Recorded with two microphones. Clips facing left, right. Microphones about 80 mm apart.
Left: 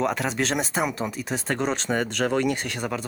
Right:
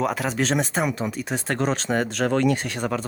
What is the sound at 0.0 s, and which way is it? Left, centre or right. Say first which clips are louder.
Speech: right 1 dB; centre.